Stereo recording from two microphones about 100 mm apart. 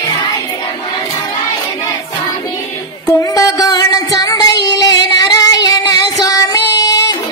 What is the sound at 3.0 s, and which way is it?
Music, 35° left (ahead or behind).